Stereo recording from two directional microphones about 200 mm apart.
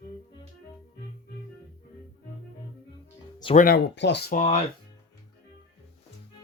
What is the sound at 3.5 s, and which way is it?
Speech, 50° left (ahead or behind).